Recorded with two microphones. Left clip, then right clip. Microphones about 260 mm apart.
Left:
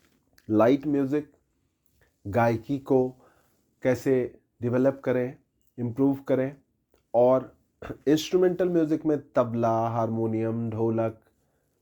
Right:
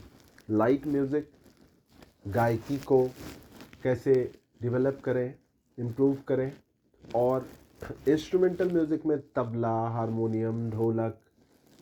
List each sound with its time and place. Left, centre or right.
0.3 s speech: left
2.3 s speech: left